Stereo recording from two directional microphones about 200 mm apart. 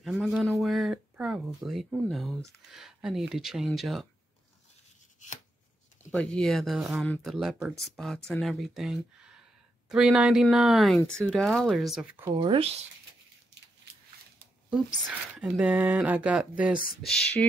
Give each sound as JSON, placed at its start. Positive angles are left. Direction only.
{"t": 0.0, "sound": "speech", "side_deg": 0}
{"t": 6.1, "sound": "speech", "side_deg": 5}
{"t": 12.4, "sound": "speech", "side_deg": -25}
{"t": 15.3, "sound": "speech", "side_deg": -5}